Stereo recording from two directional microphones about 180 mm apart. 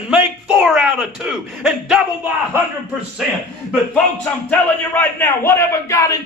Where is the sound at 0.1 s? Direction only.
5° right (ahead or behind).